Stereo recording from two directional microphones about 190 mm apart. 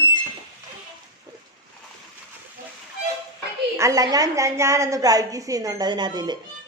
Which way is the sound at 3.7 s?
15° right (ahead or behind).